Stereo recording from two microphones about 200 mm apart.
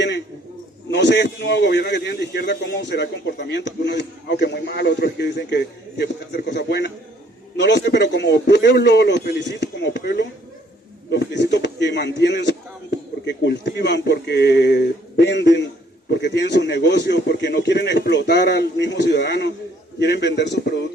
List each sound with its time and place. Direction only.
0.9 s speech: 60° left (ahead or behind)